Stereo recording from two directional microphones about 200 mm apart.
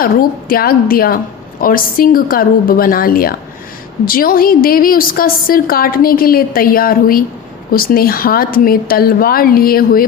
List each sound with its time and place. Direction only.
0.0 s a woman's voice: 45° left (ahead or behind)